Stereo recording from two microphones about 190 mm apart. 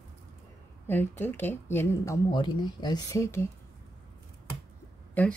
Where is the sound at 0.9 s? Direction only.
10° left (ahead or behind).